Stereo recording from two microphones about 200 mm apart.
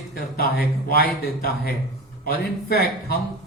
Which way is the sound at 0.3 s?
50° left (ahead or behind).